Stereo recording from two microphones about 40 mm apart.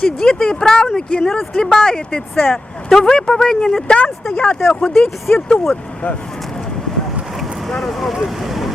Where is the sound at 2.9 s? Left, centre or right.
Centre.